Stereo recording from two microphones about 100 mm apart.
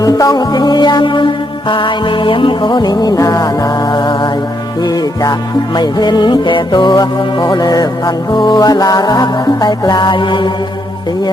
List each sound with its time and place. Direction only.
0.0 s music: 35° left (ahead or behind)
5.7 s music: 45° left (ahead or behind)